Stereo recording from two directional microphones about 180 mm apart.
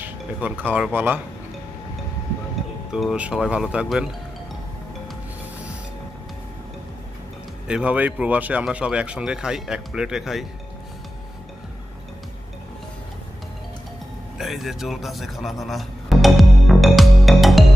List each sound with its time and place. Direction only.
0.0 s chink: 10° right (ahead or behind)
0.7 s speech: 10° right (ahead or behind)
2.9 s speech: 5° right (ahead or behind)
7.6 s speech: 5° right (ahead or behind)
14.4 s music: centre (ahead or behind)